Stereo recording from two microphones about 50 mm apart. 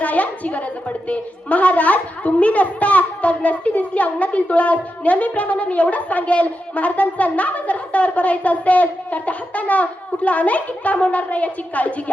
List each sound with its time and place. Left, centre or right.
0.0 s a woman's voice: left